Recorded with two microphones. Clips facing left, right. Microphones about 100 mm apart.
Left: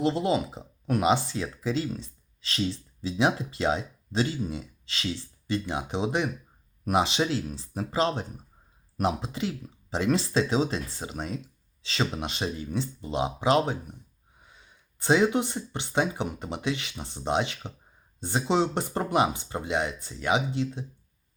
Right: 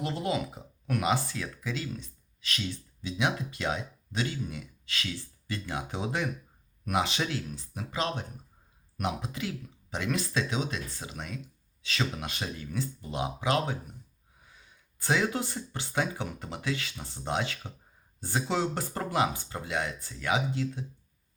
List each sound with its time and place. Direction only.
0.0 s speech: 30° left (ahead or behind)